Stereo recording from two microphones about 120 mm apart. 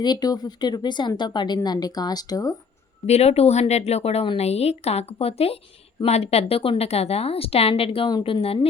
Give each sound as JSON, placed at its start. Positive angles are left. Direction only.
{"t": 0.0, "sound": "a woman's voice", "side_deg": 35}
{"t": 3.1, "sound": "a woman's voice", "side_deg": 60}